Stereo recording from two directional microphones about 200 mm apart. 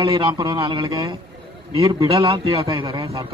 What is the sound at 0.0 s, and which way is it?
Speech, 20° right (ahead or behind).